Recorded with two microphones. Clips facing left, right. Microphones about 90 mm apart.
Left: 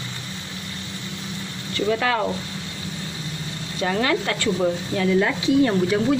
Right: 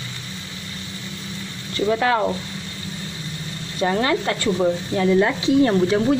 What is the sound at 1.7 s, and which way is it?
Speech, 25° right (ahead or behind).